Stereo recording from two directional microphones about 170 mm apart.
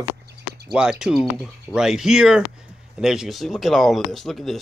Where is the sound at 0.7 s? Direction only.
5° right (ahead or behind).